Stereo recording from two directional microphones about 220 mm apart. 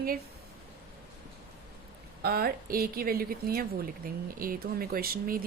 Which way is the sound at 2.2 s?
45° right (ahead or behind).